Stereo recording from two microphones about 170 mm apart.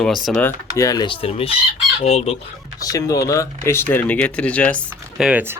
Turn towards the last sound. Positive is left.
turn(degrees=-10)  # may be behind; listen again after turning